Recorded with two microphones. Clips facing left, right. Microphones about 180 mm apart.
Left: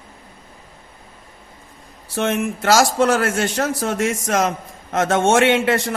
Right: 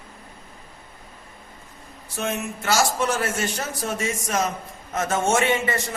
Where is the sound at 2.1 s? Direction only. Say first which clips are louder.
Left 7 dB; 90° left.